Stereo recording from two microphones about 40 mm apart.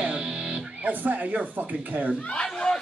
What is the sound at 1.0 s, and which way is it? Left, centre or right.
Speech, right.